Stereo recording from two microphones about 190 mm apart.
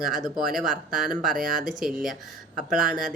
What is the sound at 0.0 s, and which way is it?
Speech, centre (ahead or behind).